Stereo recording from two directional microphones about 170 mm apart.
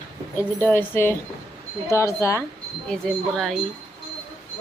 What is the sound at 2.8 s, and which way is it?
Speech, 5° left (ahead or behind).